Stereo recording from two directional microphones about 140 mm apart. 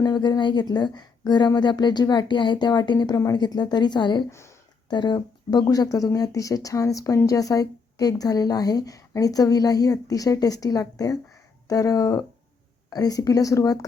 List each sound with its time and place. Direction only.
0.0 s a woman's voice: 30° left (ahead or behind)
4.3 s speech: 20° left (ahead or behind)
4.9 s speech: 30° left (ahead or behind)